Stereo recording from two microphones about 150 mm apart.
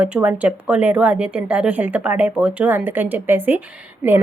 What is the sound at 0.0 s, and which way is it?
Speech, 10° right (ahead or behind).